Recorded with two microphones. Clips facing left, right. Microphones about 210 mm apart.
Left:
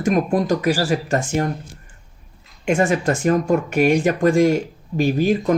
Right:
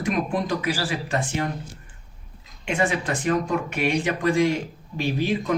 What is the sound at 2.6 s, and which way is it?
Speech, 45° left (ahead or behind).